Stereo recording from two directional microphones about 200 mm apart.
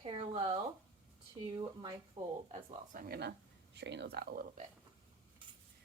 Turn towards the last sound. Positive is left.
turn(degrees=-45)  # may be behind; listen again after turning